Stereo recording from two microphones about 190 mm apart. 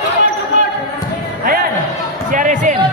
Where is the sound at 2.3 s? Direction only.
45° right (ahead or behind).